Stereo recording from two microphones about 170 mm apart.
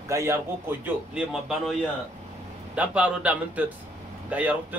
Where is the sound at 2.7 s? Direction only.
5° right (ahead or behind).